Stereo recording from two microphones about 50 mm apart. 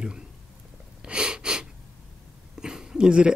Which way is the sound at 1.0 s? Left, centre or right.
Centre.